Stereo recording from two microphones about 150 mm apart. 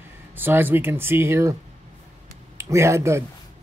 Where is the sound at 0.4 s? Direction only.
15° right (ahead or behind).